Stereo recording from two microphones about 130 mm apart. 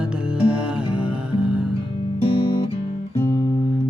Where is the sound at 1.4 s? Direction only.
10° right (ahead or behind).